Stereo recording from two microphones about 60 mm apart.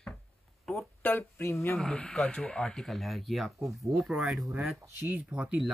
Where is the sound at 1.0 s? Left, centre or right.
Left.